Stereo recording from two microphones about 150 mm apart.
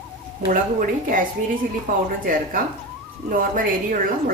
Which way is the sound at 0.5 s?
65° right (ahead or behind).